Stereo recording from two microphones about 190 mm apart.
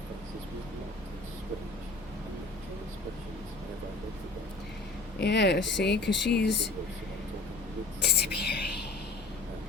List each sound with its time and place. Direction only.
5.2 s speech: 65° left (ahead or behind)
8.0 s whispering: 60° left (ahead or behind)